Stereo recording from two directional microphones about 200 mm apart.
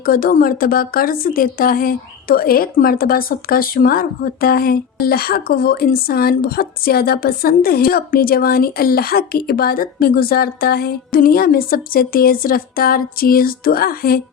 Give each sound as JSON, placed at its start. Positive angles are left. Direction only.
{"t": 0.0, "sound": "speech", "side_deg": 45}